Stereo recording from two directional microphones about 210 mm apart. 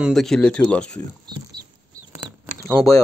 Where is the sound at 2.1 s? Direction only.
10° right (ahead or behind).